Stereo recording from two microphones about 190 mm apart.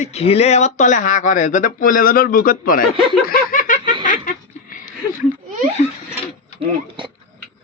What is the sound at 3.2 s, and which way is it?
Laughter, 50° left (ahead or behind).